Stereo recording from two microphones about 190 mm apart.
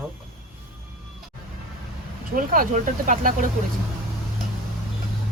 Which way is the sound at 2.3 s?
45° right (ahead or behind).